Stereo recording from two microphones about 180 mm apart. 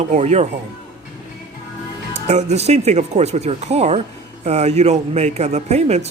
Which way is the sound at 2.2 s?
40° right (ahead or behind).